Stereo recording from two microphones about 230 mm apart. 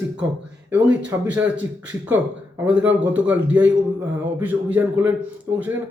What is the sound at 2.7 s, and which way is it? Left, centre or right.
Speech, centre.